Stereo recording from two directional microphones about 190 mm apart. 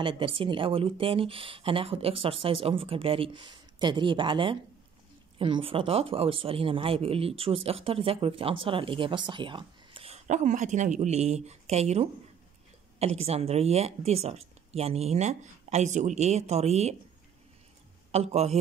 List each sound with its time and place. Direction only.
0.0 s speech: 30° right (ahead or behind)
18.1 s speech: 35° right (ahead or behind)